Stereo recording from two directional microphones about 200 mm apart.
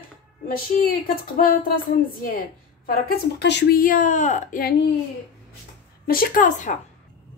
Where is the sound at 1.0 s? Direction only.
45° left (ahead or behind).